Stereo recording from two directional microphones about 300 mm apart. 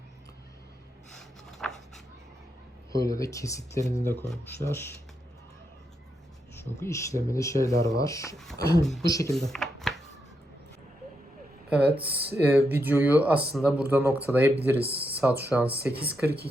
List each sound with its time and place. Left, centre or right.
1.5 s a sound: centre
2.9 s speech: centre
6.6 s speech: centre
8.8 s speech: centre
9.0 s speech: centre
9.3 s a sound: centre
11.7 s speech: centre
14.8 s speech: centre
15.1 s speech: centre
16.2 s speech: right